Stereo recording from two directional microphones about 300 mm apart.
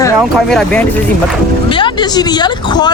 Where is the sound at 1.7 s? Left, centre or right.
Centre.